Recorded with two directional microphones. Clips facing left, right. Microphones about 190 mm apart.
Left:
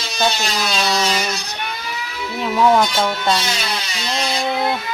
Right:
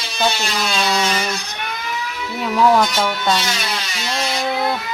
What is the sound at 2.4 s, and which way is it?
Speech, 5° left (ahead or behind).